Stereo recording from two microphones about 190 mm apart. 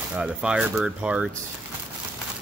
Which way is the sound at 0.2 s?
5° right (ahead or behind).